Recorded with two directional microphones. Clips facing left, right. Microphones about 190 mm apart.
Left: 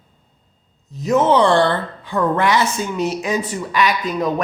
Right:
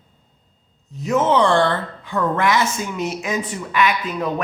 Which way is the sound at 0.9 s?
35° left (ahead or behind).